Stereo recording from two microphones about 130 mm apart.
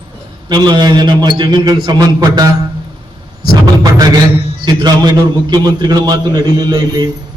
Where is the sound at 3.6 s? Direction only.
30° right (ahead or behind).